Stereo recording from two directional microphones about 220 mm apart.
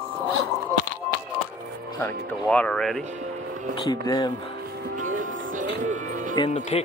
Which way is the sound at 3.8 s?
20° left (ahead or behind).